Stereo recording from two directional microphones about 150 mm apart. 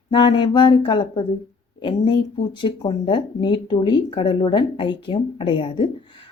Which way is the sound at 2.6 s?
35° left (ahead or behind).